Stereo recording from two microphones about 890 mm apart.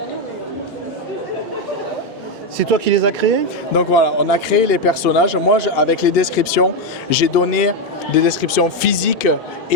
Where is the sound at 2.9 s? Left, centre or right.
Right.